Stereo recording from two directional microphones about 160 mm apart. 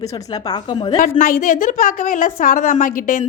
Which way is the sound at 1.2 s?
55° left (ahead or behind).